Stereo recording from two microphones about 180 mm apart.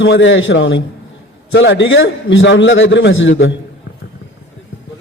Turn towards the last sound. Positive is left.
turn(degrees=90)